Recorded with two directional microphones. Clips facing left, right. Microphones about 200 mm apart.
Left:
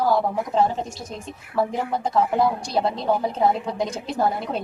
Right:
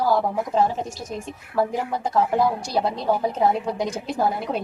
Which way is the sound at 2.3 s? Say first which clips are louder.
Even; centre (ahead or behind).